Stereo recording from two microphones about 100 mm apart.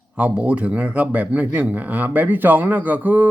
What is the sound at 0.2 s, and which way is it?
Speech, 10° right (ahead or behind).